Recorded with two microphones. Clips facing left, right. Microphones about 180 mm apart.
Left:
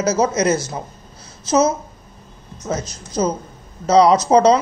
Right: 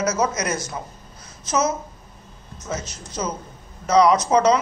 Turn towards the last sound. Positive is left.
turn(degrees=35)  # may be behind; listen again after turning